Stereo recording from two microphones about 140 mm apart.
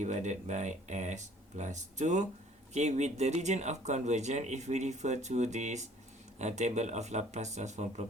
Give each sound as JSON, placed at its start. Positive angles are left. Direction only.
{"t": 0.0, "sound": "speech", "side_deg": -60}